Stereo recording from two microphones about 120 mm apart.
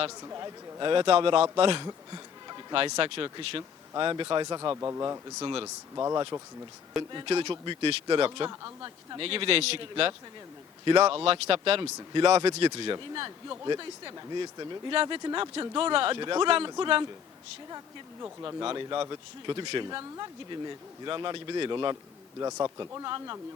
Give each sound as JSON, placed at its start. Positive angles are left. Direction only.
{"t": 0.2, "sound": "speech", "side_deg": -30}
{"t": 1.9, "sound": "a sound", "side_deg": -35}
{"t": 3.2, "sound": "speech", "side_deg": -40}
{"t": 5.4, "sound": "speech", "side_deg": -40}
{"t": 5.6, "sound": "speech", "side_deg": -25}
{"t": 7.1, "sound": "speech", "side_deg": -40}
{"t": 8.4, "sound": "speech", "side_deg": -30}
{"t": 9.1, "sound": "speech", "side_deg": -50}
{"t": 18.4, "sound": "speech", "side_deg": -45}
{"t": 22.4, "sound": "speech", "side_deg": -30}